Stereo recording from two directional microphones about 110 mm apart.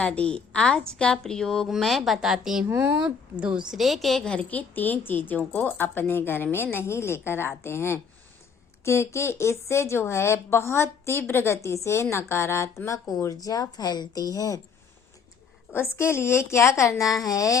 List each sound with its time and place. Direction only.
0.0 s a woman's voice: 10° left (ahead or behind); by 2.6 s 5° right (ahead or behind)
2.6 s speech: 15° right (ahead or behind)
3.7 s a woman's voice: centre (ahead or behind); by 14.6 s 30° left (ahead or behind)
15.7 s speech: 25° left (ahead or behind)